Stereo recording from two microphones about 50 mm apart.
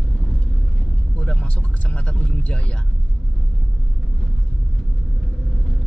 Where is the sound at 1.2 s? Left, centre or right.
Left.